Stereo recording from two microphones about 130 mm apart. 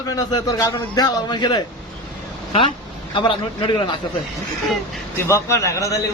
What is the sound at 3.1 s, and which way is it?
Speech, 40° left (ahead or behind).